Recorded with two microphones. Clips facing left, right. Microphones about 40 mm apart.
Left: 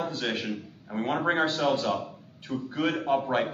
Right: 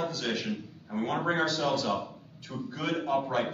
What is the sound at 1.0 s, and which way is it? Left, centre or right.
A man's voice, left.